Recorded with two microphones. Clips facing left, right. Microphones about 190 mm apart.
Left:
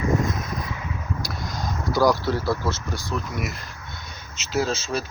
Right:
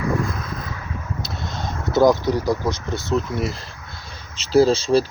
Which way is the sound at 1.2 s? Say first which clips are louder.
Right 1 dB; 25° right (ahead or behind).